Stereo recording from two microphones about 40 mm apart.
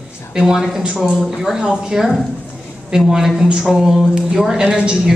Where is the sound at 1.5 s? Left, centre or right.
Centre.